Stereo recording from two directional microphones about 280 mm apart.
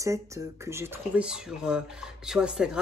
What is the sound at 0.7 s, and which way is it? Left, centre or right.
Speech, centre.